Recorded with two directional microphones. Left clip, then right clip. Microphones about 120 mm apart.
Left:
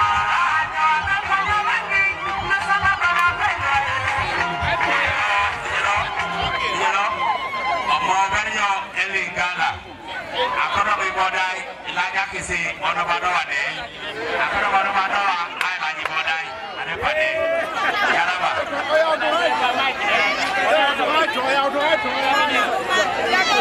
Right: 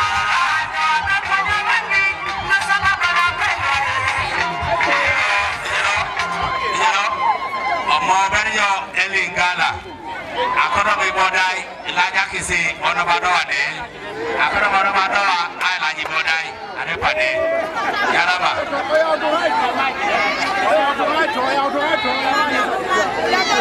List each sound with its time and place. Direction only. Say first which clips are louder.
0.0 s music: right 1 dB; 25° right (ahead or behind)
6.8 s a sound: right 4 dB; 25° right (ahead or behind)
12.0 s a man's voice: right 5 dB; 20° right (ahead or behind)
18.9 s speech: right 1 dB; 10° left (ahead or behind)